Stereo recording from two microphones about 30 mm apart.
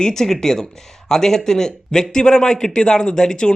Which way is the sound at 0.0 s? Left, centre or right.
Centre.